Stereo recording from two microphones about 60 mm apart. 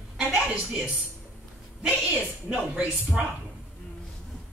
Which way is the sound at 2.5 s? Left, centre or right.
Right.